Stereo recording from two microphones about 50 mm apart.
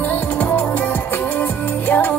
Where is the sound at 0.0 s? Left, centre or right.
Left.